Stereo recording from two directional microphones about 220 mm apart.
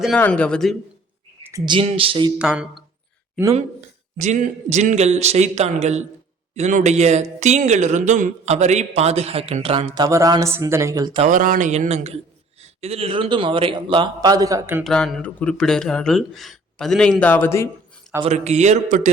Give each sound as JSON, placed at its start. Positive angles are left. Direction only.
{"t": 0.0, "sound": "speech", "side_deg": 5}
{"t": 1.5, "sound": "speech", "side_deg": -15}
{"t": 2.4, "sound": "speech", "side_deg": -5}
{"t": 3.5, "sound": "speech", "side_deg": -30}
{"t": 11.3, "sound": "speech", "side_deg": -40}
{"t": 14.8, "sound": "speech", "side_deg": 0}
{"t": 18.2, "sound": "speech", "side_deg": -30}